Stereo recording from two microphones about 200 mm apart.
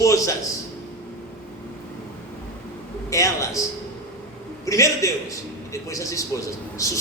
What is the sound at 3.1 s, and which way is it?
Speech, 15° left (ahead or behind).